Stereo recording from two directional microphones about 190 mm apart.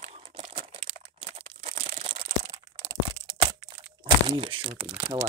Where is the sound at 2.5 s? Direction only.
25° right (ahead or behind).